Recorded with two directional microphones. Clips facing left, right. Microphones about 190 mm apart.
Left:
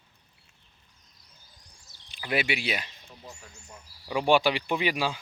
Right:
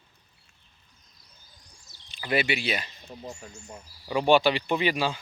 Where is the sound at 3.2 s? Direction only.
40° right (ahead or behind).